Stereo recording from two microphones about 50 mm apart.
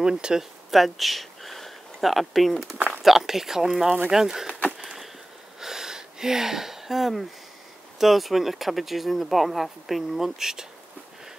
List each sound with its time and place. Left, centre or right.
0.0 s speech: centre
0.7 s speech: centre
4.7 s a sound: centre
8.0 s speech: centre